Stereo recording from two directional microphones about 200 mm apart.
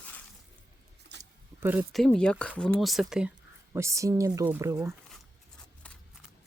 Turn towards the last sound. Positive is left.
turn(degrees=-10)  # may be behind; listen again after turning